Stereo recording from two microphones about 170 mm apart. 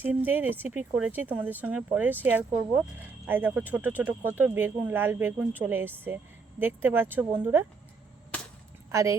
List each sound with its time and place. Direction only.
0.0 s speech: 10° right (ahead or behind)
8.9 s speech: 20° right (ahead or behind)